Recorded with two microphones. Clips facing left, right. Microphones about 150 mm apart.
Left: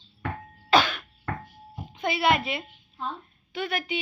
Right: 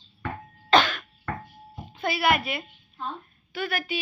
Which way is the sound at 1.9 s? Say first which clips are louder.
Even; 20° left (ahead or behind).